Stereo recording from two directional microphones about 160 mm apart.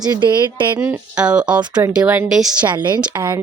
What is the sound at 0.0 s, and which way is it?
Speech, 25° right (ahead or behind).